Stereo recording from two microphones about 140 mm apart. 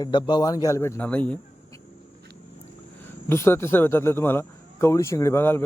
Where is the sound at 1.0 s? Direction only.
10° left (ahead or behind).